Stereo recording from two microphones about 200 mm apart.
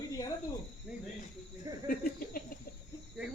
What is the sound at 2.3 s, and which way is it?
Chicken, 45° left (ahead or behind).